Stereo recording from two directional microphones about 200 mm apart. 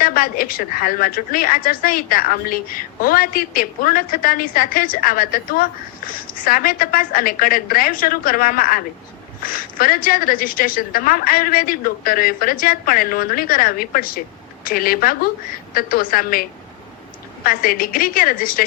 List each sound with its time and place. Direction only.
0.0 s a woman's voice: 45° left (ahead or behind)